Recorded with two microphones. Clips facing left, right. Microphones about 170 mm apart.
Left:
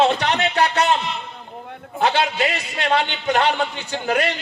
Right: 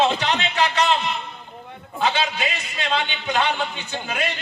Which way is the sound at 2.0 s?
60° left (ahead or behind).